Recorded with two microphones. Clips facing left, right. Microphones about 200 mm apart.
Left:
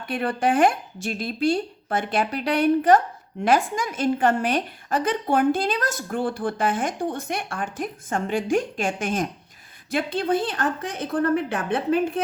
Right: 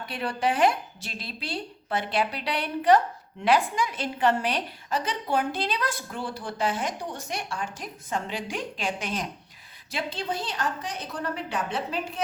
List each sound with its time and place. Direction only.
0.0 s a woman's voice: 50° left (ahead or behind)